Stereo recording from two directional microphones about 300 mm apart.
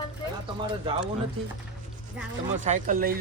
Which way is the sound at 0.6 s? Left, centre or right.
Centre.